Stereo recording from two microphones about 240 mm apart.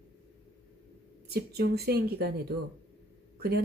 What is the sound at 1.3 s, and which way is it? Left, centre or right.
Speech, right.